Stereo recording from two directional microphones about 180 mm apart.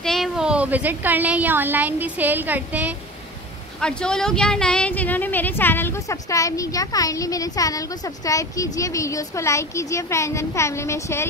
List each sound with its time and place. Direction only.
0.0 s a woman's voice: centre (ahead or behind)
3.8 s speech: 5° left (ahead or behind)